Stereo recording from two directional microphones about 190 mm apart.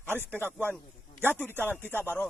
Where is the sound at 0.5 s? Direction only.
5° left (ahead or behind).